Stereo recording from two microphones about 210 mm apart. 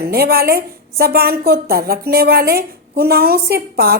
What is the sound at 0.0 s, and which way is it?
A woman's voice, 50° right (ahead or behind).